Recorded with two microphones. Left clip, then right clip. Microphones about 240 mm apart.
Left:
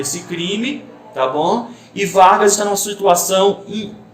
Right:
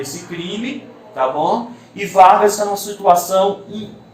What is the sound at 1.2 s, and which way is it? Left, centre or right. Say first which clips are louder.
A man's voice: even; left.